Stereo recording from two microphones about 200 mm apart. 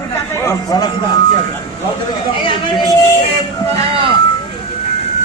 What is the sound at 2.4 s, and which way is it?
Chatter, 25° left (ahead or behind).